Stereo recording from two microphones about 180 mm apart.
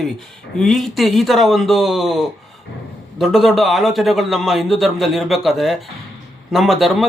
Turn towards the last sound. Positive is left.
turn(degrees=0)  # may be behind; listen again after turning